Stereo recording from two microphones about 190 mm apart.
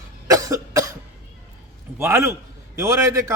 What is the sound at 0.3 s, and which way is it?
Cough, 15° right (ahead or behind).